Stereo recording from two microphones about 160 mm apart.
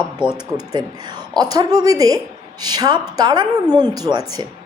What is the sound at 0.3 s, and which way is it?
A woman's voice, 25° right (ahead or behind).